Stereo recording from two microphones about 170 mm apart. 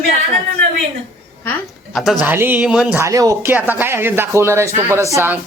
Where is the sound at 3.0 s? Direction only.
20° right (ahead or behind).